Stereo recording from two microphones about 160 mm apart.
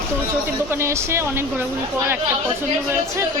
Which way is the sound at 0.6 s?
15° right (ahead or behind).